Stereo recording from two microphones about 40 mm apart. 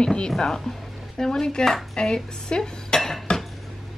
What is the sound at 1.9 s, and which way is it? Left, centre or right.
Dishes, left.